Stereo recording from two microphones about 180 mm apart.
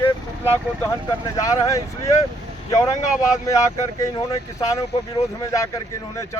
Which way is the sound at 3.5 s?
15° left (ahead or behind).